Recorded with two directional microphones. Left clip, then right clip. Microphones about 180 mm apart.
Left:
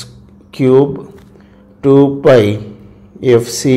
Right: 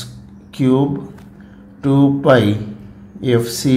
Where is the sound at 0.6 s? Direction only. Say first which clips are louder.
Left 7 dB; 35° left (ahead or behind).